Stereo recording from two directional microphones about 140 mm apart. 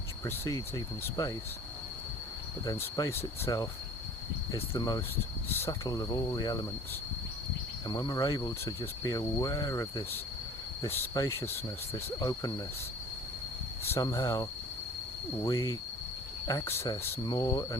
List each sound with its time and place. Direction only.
0.3 s speech: 25° left (ahead or behind)
2.7 s speech: 20° left (ahead or behind)
7.9 s speech: 25° left (ahead or behind)
13.9 s speech: 20° left (ahead or behind)
15.4 s speech: 25° left (ahead or behind)